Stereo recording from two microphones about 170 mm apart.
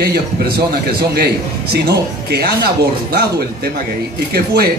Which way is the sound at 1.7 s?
70° right (ahead or behind).